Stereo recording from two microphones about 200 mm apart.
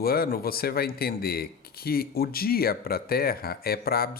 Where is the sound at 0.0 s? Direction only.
50° left (ahead or behind).